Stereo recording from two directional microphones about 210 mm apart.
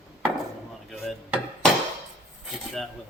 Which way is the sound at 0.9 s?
Centre (ahead or behind).